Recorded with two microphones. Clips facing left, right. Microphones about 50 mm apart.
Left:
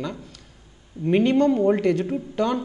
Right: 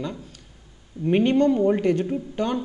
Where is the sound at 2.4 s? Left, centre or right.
Left.